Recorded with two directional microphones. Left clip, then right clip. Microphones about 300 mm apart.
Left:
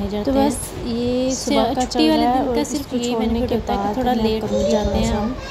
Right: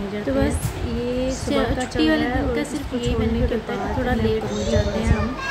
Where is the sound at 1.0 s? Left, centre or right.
Centre.